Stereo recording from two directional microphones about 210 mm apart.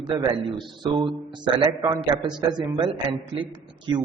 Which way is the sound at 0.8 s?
20° right (ahead or behind).